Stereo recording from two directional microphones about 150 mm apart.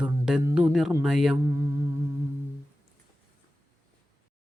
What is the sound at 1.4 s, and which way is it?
Humming, 20° right (ahead or behind).